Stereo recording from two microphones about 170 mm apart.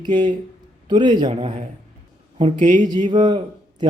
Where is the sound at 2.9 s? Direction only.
25° right (ahead or behind).